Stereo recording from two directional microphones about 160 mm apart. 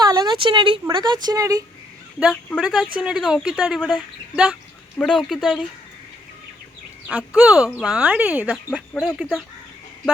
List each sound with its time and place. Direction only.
0.0 s a sound: 25° right (ahead or behind)
0.9 s speech: 30° right (ahead or behind)
2.1 s speech: centre (ahead or behind)
4.9 s speech: 5° left (ahead or behind)
7.1 s speech: 10° right (ahead or behind)
9.0 s speech: 5° left (ahead or behind)